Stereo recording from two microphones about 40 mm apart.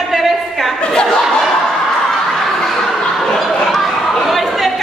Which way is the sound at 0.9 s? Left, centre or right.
Centre.